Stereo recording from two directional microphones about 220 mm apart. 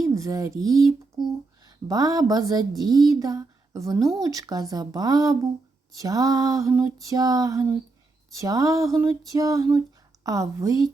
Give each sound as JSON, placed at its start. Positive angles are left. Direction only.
{"t": 0.0, "sound": "speech", "side_deg": -15}